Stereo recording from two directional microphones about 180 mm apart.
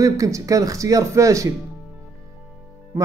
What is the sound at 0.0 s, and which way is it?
A man's voice, 20° right (ahead or behind).